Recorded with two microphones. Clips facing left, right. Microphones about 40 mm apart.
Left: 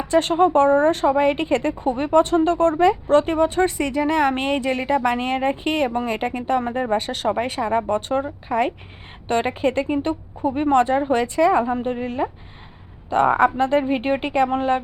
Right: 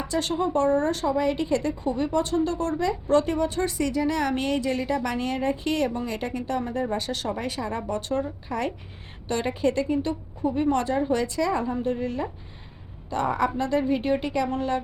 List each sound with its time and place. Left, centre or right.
0.1 s a woman's voice: left